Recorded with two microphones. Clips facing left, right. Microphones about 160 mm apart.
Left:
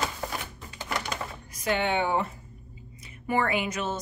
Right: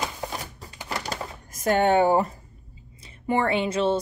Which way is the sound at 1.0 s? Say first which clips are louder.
Right 2 dB; 40° right (ahead or behind).